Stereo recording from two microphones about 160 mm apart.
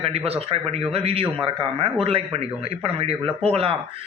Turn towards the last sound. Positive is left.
turn(degrees=-40)  # may be behind; listen again after turning